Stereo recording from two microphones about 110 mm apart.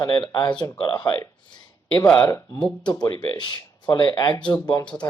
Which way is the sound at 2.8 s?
40° left (ahead or behind).